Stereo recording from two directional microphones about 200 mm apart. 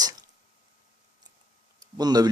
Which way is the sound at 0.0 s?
20° right (ahead or behind).